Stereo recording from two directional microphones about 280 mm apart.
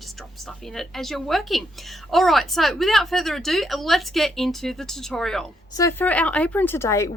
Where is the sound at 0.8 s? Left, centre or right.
Centre.